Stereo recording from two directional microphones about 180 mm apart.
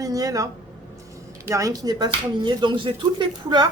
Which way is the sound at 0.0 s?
20° right (ahead or behind).